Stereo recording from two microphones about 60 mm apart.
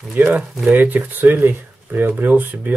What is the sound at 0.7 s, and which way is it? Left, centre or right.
Speech, right.